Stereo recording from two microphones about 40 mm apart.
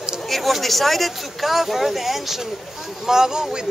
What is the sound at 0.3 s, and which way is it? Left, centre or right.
Speech, centre.